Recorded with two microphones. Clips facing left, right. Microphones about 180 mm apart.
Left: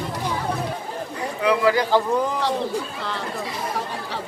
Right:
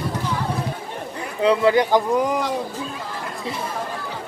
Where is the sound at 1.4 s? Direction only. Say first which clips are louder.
Right 3 dB; 25° right (ahead or behind).